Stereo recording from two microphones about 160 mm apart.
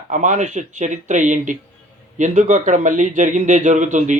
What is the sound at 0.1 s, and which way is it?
A man's voice, 50° right (ahead or behind).